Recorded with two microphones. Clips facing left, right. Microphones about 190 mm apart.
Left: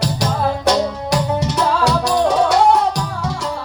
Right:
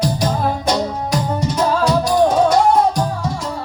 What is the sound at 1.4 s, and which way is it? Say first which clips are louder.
Music: even; 75° left (ahead or behind).